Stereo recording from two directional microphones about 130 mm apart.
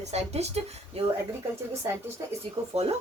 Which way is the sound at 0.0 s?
55° right (ahead or behind).